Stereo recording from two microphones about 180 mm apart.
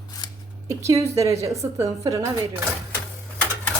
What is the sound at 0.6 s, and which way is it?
A woman's voice, 15° right (ahead or behind).